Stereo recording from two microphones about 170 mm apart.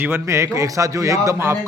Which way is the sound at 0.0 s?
15° right (ahead or behind).